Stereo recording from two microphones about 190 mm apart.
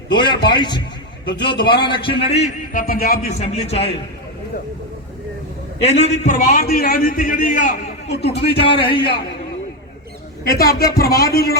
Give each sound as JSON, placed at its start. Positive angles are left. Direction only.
{"t": 0.1, "sound": "a man's voice", "side_deg": 25}
{"t": 2.7, "sound": "speech", "side_deg": 50}
{"t": 5.8, "sound": "a man's voice", "side_deg": 35}
{"t": 8.1, "sound": "speech", "side_deg": 60}
{"t": 8.5, "sound": "a man's voice", "side_deg": 30}
{"t": 10.6, "sound": "a man's voice", "side_deg": 50}